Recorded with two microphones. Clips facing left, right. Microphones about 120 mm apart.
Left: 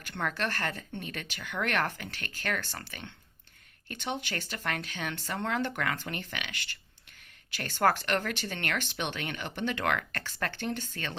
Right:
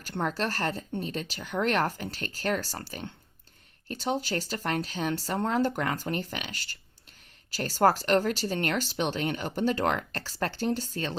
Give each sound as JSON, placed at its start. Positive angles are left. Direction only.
{"t": 0.2, "sound": "speech", "side_deg": -30}